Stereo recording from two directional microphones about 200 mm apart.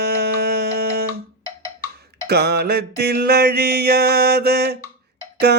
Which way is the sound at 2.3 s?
55° right (ahead or behind).